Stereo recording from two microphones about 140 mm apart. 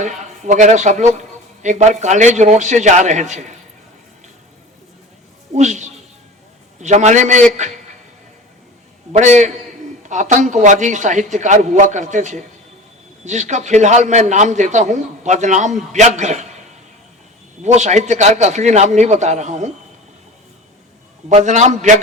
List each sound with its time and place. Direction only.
0.0 s a man's voice: 60° right (ahead or behind)
5.5 s a man's voice: 55° right (ahead or behind)
9.1 s a man's voice: 55° right (ahead or behind)
17.6 s a man's voice: 55° right (ahead or behind)
21.2 s a man's voice: 60° right (ahead or behind)